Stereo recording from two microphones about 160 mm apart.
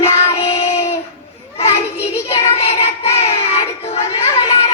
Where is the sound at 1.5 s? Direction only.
40° left (ahead or behind).